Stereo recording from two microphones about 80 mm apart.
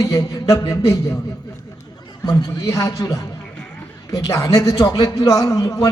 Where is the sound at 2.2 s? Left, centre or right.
Left.